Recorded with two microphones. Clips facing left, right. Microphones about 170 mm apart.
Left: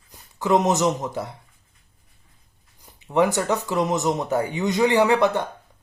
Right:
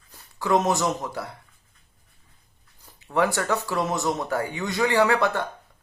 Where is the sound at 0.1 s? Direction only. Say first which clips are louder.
Left 2 dB; 20° left (ahead or behind).